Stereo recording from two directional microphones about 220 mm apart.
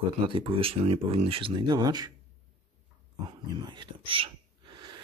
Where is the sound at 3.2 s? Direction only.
20° right (ahead or behind).